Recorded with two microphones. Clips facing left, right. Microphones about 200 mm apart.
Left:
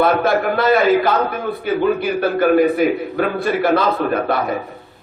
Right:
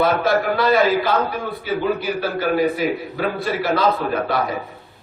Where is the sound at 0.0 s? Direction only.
55° left (ahead or behind).